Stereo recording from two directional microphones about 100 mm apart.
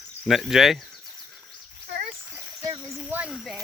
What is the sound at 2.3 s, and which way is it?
Splash, 35° right (ahead or behind).